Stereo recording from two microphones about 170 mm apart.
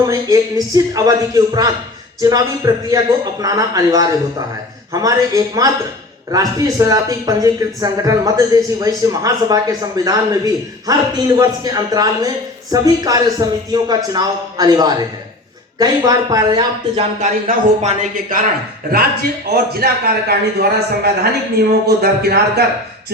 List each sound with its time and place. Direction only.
0.0 s a man's voice: 20° right (ahead or behind)
17.2 s speech: 45° right (ahead or behind)
19.5 s a man's voice: 70° right (ahead or behind)